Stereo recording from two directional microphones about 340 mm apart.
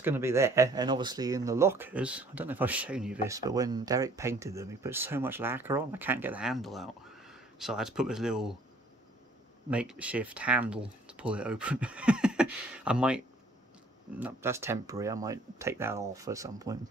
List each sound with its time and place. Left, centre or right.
0.0 s speech: centre
9.7 s speech: centre
14.2 s speech: centre